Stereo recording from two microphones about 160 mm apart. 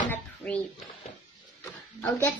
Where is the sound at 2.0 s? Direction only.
10° left (ahead or behind).